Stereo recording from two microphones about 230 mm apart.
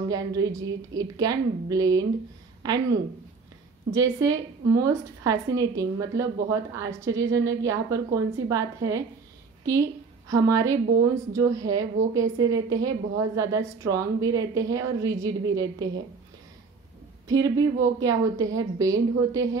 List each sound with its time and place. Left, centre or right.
0.1 s a woman's voice: centre
17.3 s a woman's voice: centre